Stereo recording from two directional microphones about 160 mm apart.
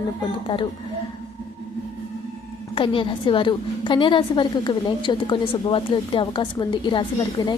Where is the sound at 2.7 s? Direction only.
30° left (ahead or behind).